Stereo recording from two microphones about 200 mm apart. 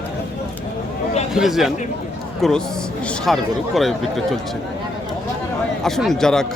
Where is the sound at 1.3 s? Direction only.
Centre (ahead or behind).